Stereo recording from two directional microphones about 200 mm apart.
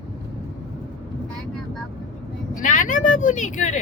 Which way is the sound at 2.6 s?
40° left (ahead or behind).